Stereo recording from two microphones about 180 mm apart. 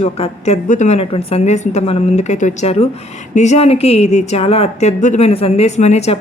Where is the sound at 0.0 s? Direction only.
35° left (ahead or behind).